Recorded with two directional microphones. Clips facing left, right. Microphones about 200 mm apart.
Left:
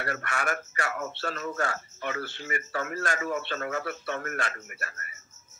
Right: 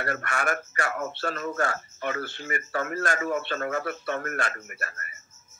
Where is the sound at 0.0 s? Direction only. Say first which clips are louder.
Right 3 dB; 50° right (ahead or behind).